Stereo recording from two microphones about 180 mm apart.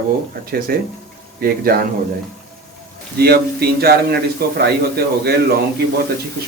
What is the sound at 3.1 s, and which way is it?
Speech, 60° right (ahead or behind).